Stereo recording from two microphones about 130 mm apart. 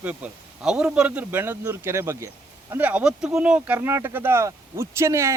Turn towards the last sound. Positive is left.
turn(degrees=-20)  # may be behind; listen again after turning